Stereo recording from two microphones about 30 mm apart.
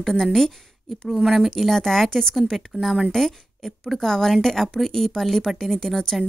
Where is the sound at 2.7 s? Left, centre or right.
Centre.